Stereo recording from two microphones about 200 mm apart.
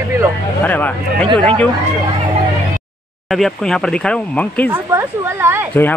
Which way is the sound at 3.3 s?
Centre (ahead or behind).